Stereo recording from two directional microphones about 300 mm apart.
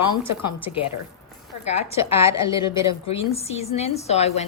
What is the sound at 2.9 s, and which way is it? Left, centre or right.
A woman's voice, centre.